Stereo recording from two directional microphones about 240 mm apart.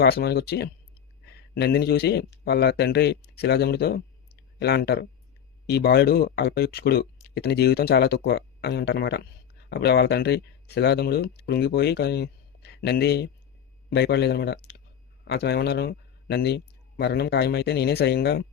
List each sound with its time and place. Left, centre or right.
0.0 s a man's voice: left